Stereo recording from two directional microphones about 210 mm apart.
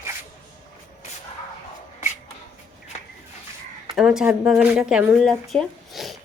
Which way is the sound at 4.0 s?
5° right (ahead or behind).